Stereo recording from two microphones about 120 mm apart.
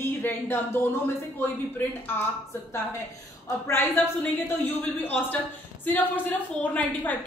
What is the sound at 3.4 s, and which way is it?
A woman's voice, 20° left (ahead or behind).